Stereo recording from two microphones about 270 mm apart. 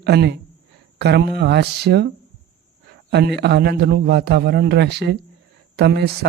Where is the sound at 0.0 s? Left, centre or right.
Right.